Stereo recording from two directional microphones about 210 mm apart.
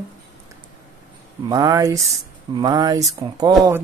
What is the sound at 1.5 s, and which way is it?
Speech, 15° right (ahead or behind).